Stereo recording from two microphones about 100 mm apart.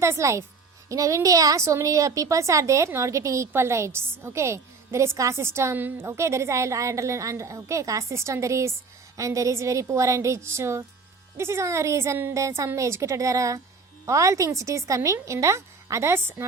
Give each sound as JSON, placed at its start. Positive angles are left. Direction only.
{"t": 0.0, "sound": "a woman's voice", "side_deg": -30}